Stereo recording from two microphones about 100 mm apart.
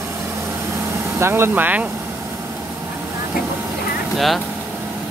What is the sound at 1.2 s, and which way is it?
Speech, 25° right (ahead or behind).